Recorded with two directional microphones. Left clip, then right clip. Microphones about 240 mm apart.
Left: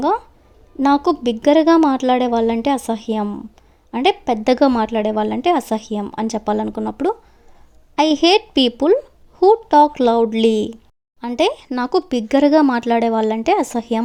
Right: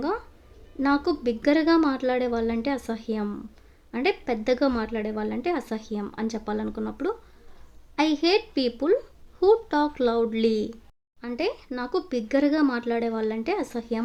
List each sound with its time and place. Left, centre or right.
0.8 s a woman's voice: left